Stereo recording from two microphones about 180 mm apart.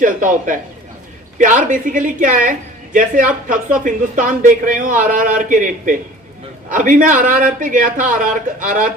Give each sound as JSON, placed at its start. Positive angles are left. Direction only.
{"t": 0.0, "sound": "a man's voice", "side_deg": -45}